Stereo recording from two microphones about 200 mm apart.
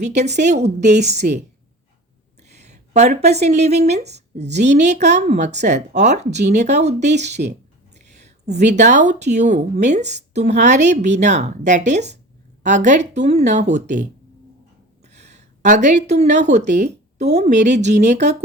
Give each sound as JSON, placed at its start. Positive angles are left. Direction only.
{"t": 0.0, "sound": "speech", "side_deg": -35}
{"t": 2.4, "sound": "speech", "side_deg": -35}
{"t": 15.0, "sound": "a woman's voice", "side_deg": -35}